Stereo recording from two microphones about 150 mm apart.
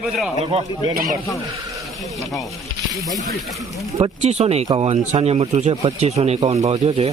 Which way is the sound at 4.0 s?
45° right (ahead or behind).